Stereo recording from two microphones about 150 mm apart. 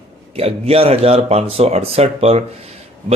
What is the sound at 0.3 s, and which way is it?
Speech, 40° right (ahead or behind).